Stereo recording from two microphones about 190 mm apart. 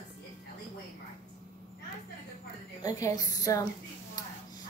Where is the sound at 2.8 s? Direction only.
20° left (ahead or behind).